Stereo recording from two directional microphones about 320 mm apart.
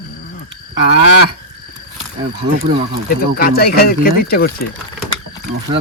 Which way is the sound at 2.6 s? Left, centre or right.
Right.